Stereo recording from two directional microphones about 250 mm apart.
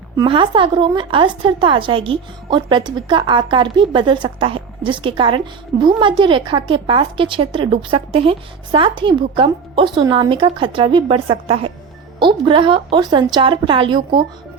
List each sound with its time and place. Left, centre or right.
0.2 s a woman's voice: centre